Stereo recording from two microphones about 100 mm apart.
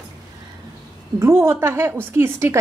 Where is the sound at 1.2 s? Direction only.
25° right (ahead or behind).